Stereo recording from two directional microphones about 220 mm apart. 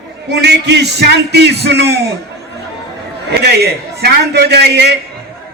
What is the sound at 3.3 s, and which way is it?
A man's voice, 50° right (ahead or behind).